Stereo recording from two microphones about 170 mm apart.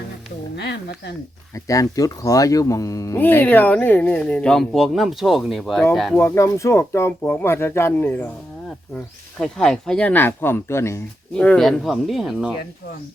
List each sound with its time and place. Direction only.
0.5 s speech: 80° left
1.5 s speech: 20° left (ahead or behind); by 6.1 s centre (ahead or behind)
6.1 s speech: 15° left (ahead or behind)
9.4 s speech: 5° left (ahead or behind)